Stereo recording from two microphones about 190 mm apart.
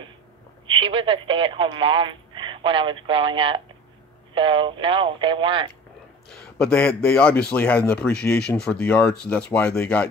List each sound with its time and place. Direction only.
0.7 s speech: 25° right (ahead or behind)
6.3 s a man's voice: 5° left (ahead or behind)